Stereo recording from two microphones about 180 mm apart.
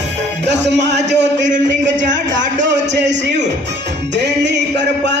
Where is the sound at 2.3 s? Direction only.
80° right.